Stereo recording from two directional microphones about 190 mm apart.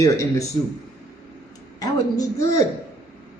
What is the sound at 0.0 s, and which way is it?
Speech, 15° left (ahead or behind).